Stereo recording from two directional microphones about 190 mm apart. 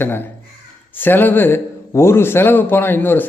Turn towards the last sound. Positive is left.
turn(degrees=10)  # may be behind; listen again after turning